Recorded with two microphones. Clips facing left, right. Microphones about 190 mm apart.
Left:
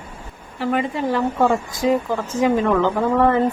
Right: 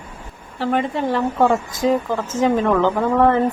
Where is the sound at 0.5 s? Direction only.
Centre (ahead or behind).